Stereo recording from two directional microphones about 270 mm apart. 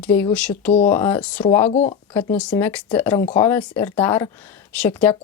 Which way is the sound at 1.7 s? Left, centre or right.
Left.